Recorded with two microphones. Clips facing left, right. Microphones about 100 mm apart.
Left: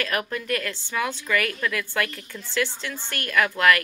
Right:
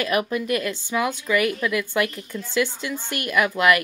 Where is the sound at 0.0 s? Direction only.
15° right (ahead or behind).